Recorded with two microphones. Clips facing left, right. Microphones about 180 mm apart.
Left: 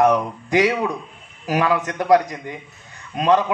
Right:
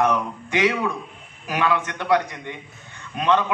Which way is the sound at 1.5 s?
35° left (ahead or behind).